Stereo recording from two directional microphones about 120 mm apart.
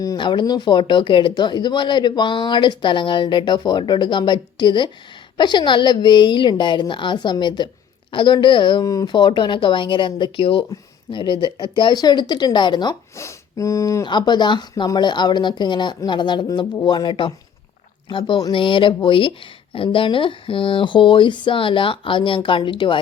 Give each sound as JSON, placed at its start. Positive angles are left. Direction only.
{"t": 0.2, "sound": "speech", "side_deg": 40}
{"t": 8.8, "sound": "speech", "side_deg": 30}
{"t": 13.1, "sound": "speech", "side_deg": 25}
{"t": 14.0, "sound": "speech", "side_deg": 40}